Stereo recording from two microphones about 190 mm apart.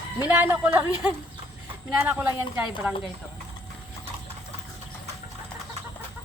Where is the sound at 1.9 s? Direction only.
5° right (ahead or behind).